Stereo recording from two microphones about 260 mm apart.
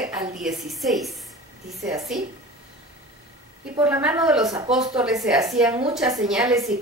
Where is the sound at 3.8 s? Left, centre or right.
Centre.